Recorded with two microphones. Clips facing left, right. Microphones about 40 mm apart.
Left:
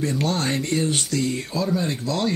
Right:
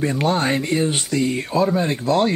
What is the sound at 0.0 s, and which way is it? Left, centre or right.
Speech, right.